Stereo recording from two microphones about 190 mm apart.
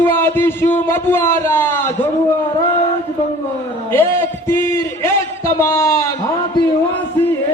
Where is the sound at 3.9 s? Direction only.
10° left (ahead or behind).